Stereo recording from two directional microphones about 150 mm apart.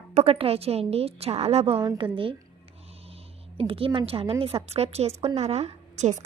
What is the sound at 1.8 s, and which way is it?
Speech, 30° right (ahead or behind).